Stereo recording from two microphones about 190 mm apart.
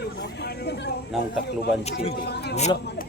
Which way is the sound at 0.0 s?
60° left (ahead or behind).